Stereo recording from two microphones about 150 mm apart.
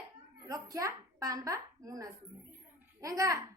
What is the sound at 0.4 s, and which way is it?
A child's voice, 25° right (ahead or behind).